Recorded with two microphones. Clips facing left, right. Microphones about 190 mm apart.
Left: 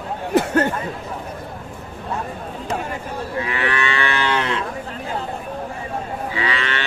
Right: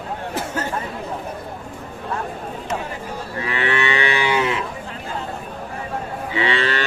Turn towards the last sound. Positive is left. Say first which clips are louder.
# right 3 dB
turn(degrees=-35)  # may be behind; listen again after turning